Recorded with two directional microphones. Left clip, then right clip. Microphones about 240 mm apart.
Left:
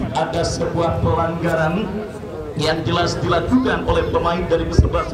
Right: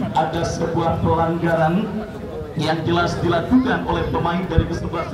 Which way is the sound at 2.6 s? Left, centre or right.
Left.